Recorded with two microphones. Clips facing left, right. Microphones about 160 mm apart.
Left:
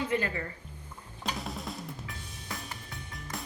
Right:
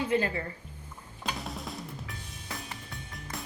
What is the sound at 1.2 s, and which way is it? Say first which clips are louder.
Drum: even; centre (ahead or behind).